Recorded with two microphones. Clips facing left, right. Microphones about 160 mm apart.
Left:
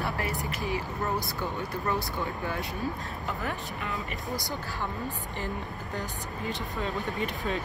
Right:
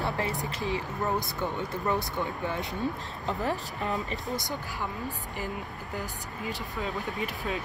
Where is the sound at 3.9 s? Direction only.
20° right (ahead or behind).